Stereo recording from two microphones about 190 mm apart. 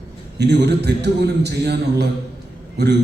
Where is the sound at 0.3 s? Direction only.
60° right (ahead or behind).